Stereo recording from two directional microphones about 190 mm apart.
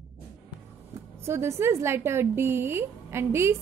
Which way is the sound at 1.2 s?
15° right (ahead or behind).